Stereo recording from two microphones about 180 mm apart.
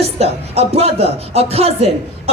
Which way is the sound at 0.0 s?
35° right (ahead or behind).